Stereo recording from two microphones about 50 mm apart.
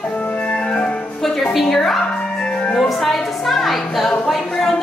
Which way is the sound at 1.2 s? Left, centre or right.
Centre.